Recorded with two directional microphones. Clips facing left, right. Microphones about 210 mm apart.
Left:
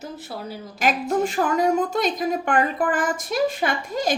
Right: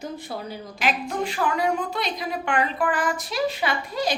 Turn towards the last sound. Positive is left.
turn(degrees=50)  # may be behind; listen again after turning